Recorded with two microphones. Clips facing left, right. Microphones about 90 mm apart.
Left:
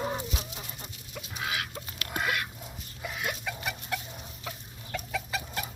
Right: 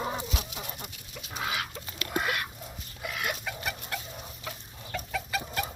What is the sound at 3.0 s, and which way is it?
Chicken, 65° right (ahead or behind).